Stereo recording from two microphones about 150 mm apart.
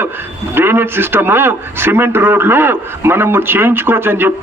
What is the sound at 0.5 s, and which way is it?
A man's voice, 15° right (ahead or behind).